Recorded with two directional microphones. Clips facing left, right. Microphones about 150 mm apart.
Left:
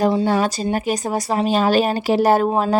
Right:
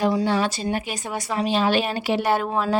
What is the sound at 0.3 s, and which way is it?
A woman's voice, 45° left (ahead or behind).